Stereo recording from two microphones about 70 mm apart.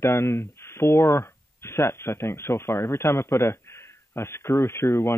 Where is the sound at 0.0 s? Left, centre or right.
Left.